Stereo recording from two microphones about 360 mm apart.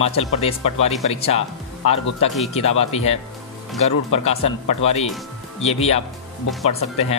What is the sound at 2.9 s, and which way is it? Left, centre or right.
Speech, centre.